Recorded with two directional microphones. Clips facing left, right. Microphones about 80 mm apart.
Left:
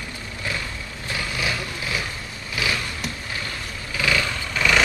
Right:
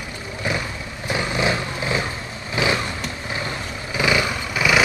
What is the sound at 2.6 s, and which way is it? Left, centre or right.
Vehicle, right.